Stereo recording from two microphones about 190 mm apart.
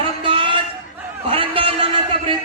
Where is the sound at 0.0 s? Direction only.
25° right (ahead or behind).